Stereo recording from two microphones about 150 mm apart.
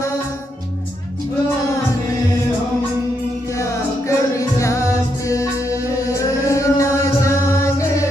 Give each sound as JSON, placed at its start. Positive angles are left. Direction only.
{"t": 3.5, "sound": "music", "side_deg": 20}